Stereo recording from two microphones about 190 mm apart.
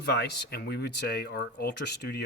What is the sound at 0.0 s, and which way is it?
Speech, 60° left (ahead or behind).